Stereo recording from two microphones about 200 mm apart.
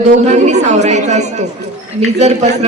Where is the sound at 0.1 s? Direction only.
35° right (ahead or behind).